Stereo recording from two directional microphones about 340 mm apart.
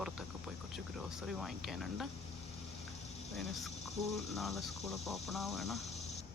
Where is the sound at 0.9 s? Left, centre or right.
Centre.